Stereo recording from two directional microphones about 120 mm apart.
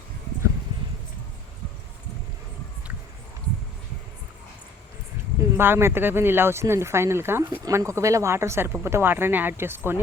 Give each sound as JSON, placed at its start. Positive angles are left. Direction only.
{"t": 5.5, "sound": "speech", "side_deg": -20}